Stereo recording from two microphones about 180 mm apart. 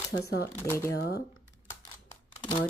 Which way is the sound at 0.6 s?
15° left (ahead or behind).